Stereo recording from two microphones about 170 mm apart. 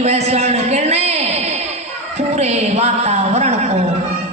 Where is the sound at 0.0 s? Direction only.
40° right (ahead or behind).